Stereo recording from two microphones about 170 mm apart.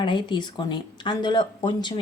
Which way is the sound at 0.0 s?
25° left (ahead or behind).